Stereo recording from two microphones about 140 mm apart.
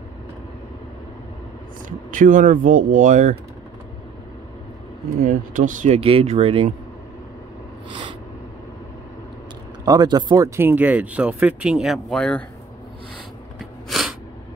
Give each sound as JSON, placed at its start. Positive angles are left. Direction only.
{"t": 1.9, "sound": "speech", "side_deg": -70}
{"t": 5.2, "sound": "speech", "side_deg": -75}
{"t": 5.9, "sound": "speech", "side_deg": -45}
{"t": 7.9, "sound": "a sound", "side_deg": -35}
{"t": 9.8, "sound": "speech", "side_deg": -30}
{"t": 13.8, "sound": "sneeze", "side_deg": 0}